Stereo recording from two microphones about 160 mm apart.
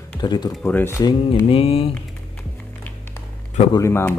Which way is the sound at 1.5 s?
35° left (ahead or behind).